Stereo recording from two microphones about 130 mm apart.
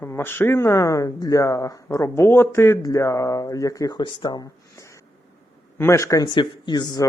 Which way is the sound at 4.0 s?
35° left (ahead or behind).